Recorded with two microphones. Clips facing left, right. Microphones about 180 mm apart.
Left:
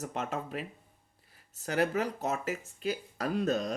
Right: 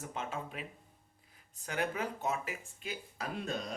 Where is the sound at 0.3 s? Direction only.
40° left (ahead or behind).